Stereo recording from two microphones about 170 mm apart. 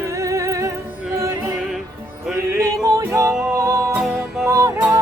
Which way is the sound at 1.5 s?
Centre (ahead or behind).